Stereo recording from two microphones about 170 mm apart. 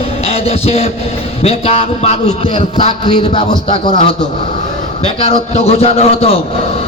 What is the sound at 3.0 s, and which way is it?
Speech, 30° left (ahead or behind).